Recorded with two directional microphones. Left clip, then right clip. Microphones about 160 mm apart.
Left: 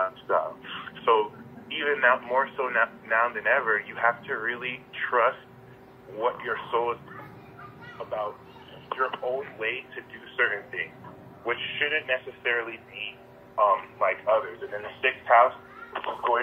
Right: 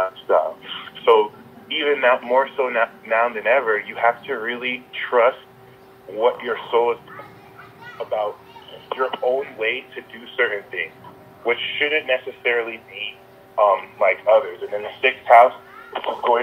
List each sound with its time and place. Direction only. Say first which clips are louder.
0.0 s radio: right 7 dB; 90° right
1.7 s speech: right 5 dB; 90° right
8.8 s speech: right 7 dB; 90° right